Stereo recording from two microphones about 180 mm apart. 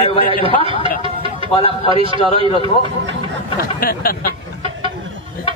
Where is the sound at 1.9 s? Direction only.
30° right (ahead or behind).